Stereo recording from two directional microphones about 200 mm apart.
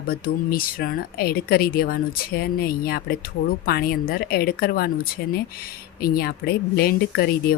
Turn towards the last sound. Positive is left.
turn(degrees=50)  # may be behind; listen again after turning